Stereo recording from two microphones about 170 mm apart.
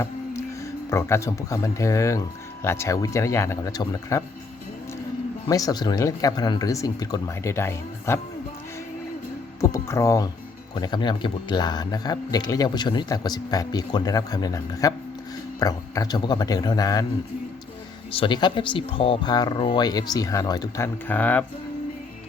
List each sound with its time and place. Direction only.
0.9 s speech: 15° left (ahead or behind)
5.5 s speech: 20° left (ahead or behind)
9.6 s a sound: 15° left (ahead or behind)
10.8 s speech: 25° left (ahead or behind)
18.1 s speech: 30° left (ahead or behind); by 21.4 s 10° left (ahead or behind)